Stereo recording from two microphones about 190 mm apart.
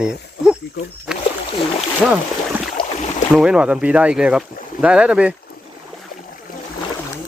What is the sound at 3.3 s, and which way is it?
Speech, 5° right (ahead or behind).